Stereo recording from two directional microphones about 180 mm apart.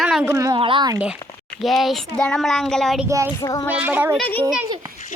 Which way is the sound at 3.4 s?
20° left (ahead or behind).